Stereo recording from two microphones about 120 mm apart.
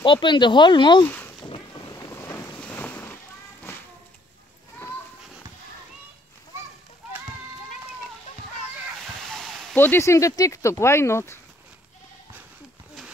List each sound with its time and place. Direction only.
0.0 s speech: 40° left (ahead or behind)
1.0 s speech: 15° left (ahead or behind)
2.0 s boat: 25° left (ahead or behind)
2.6 s boat: 15° left (ahead or behind)
3.7 s a sound: 20° left (ahead or behind)
9.3 s a sound: centre (ahead or behind)
9.8 s speech: 20° left (ahead or behind)